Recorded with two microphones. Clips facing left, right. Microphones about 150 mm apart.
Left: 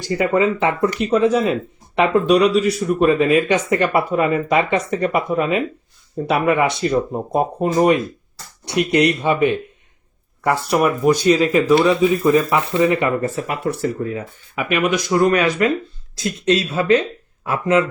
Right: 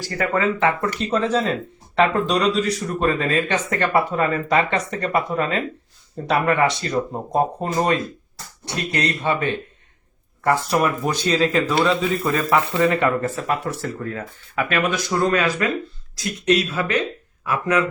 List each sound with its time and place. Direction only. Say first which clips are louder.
0.1 s speech: left 5 dB; 20° left (ahead or behind)
10.7 s speech: left 5 dB; 10° left (ahead or behind)